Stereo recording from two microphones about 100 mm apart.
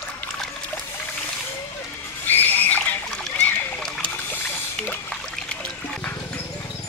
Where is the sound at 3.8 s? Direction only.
5° left (ahead or behind).